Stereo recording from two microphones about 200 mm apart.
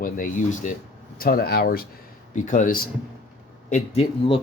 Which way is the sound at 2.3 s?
40° left (ahead or behind).